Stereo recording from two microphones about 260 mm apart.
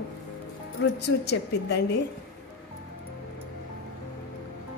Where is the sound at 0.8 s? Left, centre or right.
Left.